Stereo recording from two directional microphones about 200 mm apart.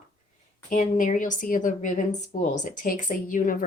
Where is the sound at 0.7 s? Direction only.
40° left (ahead or behind).